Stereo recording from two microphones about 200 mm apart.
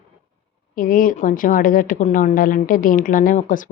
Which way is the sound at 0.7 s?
45° left (ahead or behind).